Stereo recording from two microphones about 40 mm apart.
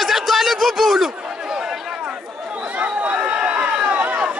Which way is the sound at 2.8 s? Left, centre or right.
Right.